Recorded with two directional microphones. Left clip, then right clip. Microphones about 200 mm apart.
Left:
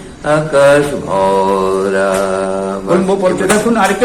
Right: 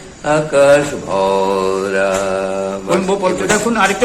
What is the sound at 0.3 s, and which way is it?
Mantra, 30° right (ahead or behind).